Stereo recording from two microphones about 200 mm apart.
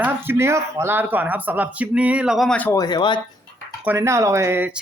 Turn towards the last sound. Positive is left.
turn(degrees=-10)  # may be behind; listen again after turning